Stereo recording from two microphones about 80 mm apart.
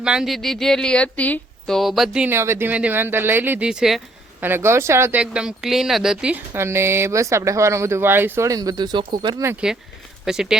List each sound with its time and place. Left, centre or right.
0.0 s speech: centre
0.3 s speech: centre
1.7 s speech: centre
2.3 s speech: right
2.6 s speech: centre
3.6 s speech: centre
4.4 s speech: right
5.1 s speech: centre
6.5 s speech: right
8.4 s speech: right
10.2 s speech: centre